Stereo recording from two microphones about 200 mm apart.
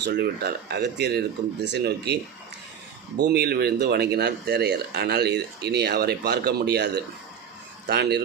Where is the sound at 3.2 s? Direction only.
55° right (ahead or behind).